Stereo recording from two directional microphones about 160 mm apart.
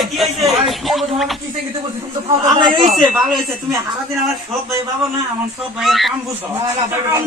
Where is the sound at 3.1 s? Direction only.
Centre (ahead or behind).